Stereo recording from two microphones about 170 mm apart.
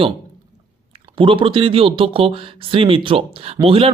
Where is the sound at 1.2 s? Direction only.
30° right (ahead or behind).